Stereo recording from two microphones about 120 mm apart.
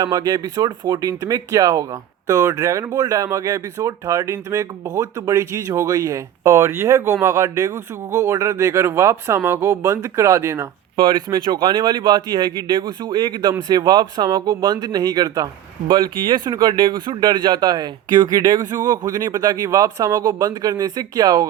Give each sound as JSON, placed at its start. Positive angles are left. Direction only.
{"t": 0.0, "sound": "speech", "side_deg": -30}
{"t": 10.9, "sound": "speech", "side_deg": -45}